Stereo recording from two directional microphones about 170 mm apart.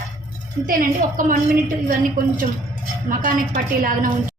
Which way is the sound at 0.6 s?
55° right (ahead or behind).